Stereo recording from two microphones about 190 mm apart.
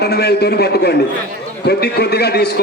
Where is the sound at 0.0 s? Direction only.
60° left (ahead or behind).